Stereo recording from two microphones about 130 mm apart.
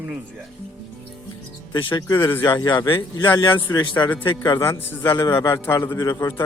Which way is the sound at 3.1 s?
35° left (ahead or behind).